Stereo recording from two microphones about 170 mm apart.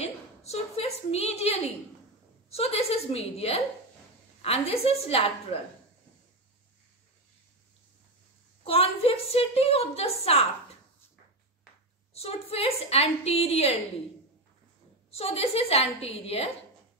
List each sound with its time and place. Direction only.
0.0 s a sound: 40° left (ahead or behind)
2.5 s a woman's voice: 35° left (ahead or behind)
8.6 s a woman's voice: 35° left (ahead or behind)
12.1 s a woman's voice: 35° left (ahead or behind)
15.0 s a woman's voice: 35° left (ahead or behind)